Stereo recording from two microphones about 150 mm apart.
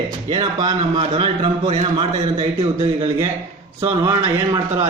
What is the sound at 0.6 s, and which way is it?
A man's voice, 35° right (ahead or behind).